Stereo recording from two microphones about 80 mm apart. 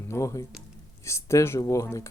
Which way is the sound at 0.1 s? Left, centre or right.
Left.